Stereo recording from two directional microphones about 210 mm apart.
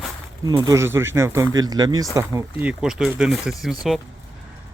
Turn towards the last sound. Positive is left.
turn(degrees=0)  # may be behind; listen again after turning